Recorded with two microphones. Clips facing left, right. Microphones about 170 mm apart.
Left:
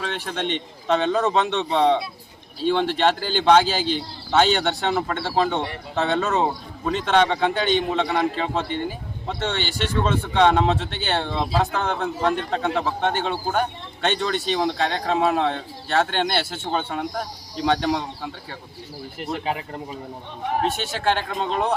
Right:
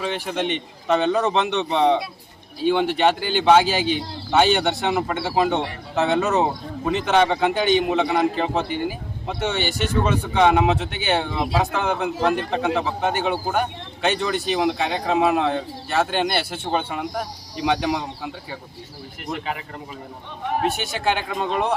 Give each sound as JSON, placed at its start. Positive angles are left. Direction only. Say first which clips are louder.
{"t": 0.0, "sound": "speech", "louder": "right 3 dB", "side_deg": -5}
{"t": 6.2, "sound": "a man's voice", "louder": "right 2 dB", "side_deg": -20}
{"t": 6.8, "sound": "speech", "louder": "right 1 dB", "side_deg": -5}
{"t": 21.0, "sound": "speech", "louder": "left 1 dB", "side_deg": -10}